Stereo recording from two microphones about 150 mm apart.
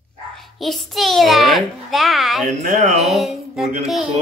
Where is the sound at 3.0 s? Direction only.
Centre (ahead or behind).